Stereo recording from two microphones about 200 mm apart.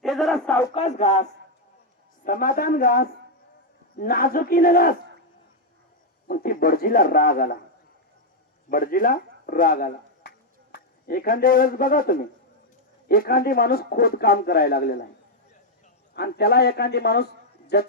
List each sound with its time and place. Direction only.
0.0 s a sound: centre (ahead or behind)
0.7 s speech: 30° left (ahead or behind)
6.2 s speech: 45° left (ahead or behind)
8.7 s speech: 45° left (ahead or behind)
16.1 s a man's voice: 55° left (ahead or behind)